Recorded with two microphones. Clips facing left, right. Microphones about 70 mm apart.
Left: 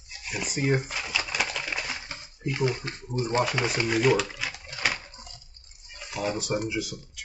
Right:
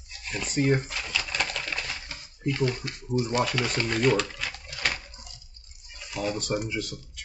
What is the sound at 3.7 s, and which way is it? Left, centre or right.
Speech, centre.